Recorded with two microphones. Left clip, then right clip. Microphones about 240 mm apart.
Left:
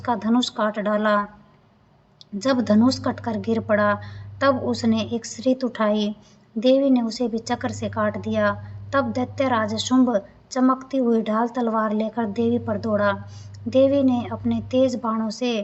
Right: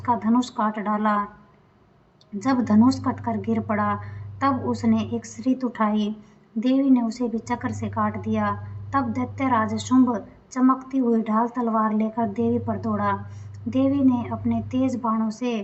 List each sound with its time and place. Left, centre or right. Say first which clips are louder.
0.0 s a woman's voice: even; left
2.4 s a woman's voice: left 1 dB; left